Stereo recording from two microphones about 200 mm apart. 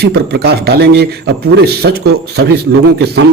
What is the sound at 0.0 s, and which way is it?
A man's voice, 55° right (ahead or behind).